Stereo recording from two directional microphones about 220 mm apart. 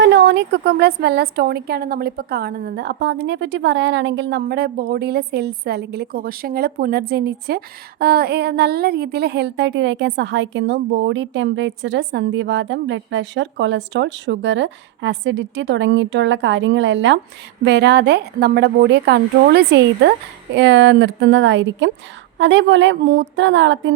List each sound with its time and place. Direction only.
0.0 s a woman's voice: 50° right (ahead or behind)